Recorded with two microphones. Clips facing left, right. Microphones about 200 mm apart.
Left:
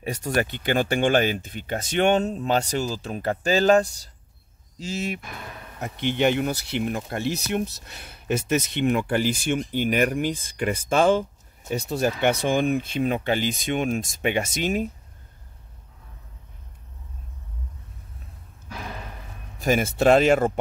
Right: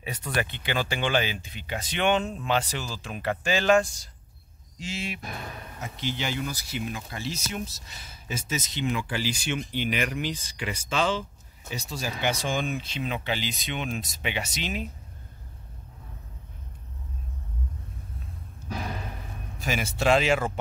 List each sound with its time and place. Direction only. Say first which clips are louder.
0.0 s speech: left 6 dB; 45° left (ahead or behind)
5.8 s speech: left 9 dB; 60° left (ahead or behind)
19.6 s speech: left 7 dB; 50° left (ahead or behind)